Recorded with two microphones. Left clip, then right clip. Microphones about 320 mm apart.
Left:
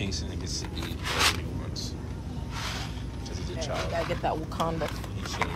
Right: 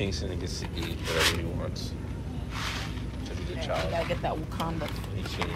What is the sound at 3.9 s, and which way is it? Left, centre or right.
Speech, left.